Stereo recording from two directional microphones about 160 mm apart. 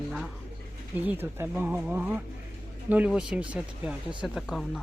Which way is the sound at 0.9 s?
10° right (ahead or behind).